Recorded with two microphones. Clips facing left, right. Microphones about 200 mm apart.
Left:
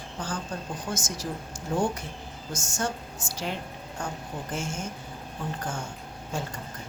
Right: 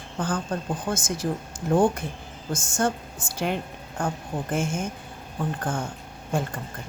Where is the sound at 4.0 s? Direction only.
55° right (ahead or behind).